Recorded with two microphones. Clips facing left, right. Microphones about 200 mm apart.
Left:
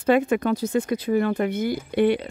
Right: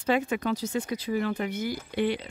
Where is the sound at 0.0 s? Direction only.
55° left (ahead or behind).